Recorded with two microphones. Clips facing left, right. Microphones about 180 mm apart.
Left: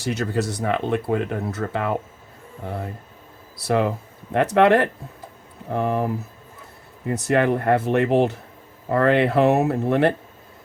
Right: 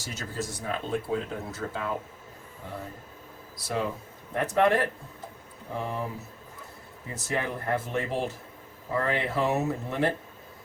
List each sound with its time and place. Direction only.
0.0 s speech: 65° left (ahead or behind)
5.6 s speech: 60° left (ahead or behind)